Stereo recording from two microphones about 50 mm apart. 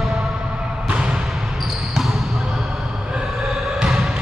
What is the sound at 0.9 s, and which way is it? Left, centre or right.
Basketball bounce, centre.